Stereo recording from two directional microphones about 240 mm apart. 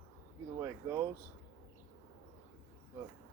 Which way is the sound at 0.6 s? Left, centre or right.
Centre.